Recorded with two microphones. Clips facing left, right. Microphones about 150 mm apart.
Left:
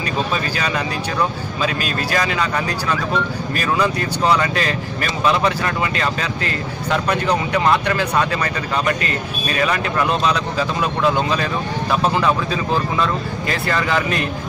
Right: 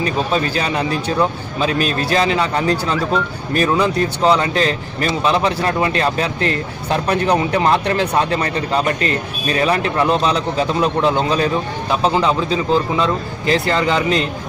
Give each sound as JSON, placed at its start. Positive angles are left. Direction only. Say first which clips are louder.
{"t": 0.0, "sound": "a man's voice", "louder": "right 4 dB", "side_deg": -25}
{"t": 7.5, "sound": "a man's voice", "louder": "right 2 dB", "side_deg": -30}